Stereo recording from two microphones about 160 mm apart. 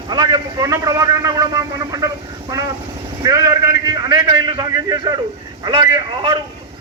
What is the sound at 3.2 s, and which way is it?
A man's voice, 25° right (ahead or behind).